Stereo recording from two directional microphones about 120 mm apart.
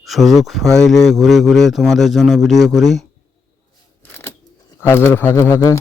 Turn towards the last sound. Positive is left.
turn(degrees=25)  # may be behind; listen again after turning